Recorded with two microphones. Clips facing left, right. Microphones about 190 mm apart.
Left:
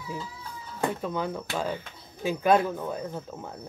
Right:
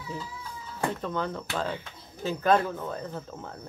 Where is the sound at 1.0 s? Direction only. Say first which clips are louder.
Left 1 dB; 10° left (ahead or behind).